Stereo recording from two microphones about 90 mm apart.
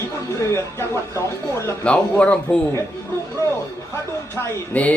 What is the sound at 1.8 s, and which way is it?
Speech, 15° left (ahead or behind).